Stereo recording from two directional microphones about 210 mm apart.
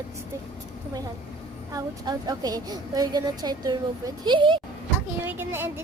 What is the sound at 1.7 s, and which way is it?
A woman's voice, 20° right (ahead or behind).